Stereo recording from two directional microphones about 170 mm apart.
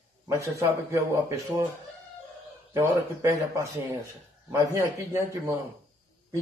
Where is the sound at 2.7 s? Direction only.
15° right (ahead or behind).